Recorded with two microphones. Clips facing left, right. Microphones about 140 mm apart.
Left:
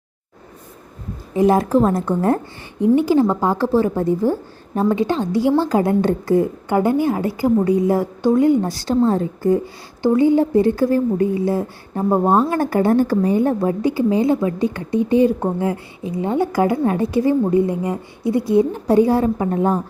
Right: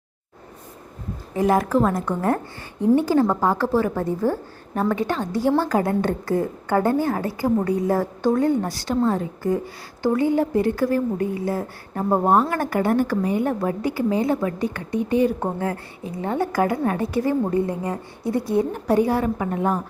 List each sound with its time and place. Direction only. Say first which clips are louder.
1.4 s a woman's voice: left 4 dB; 25° left (ahead or behind)
2.8 s a woman's voice: left 3 dB; 10° left (ahead or behind)
8.7 s a woman's voice: left 4 dB; 30° left (ahead or behind)
10.0 s a woman's voice: left 5 dB; 20° left (ahead or behind)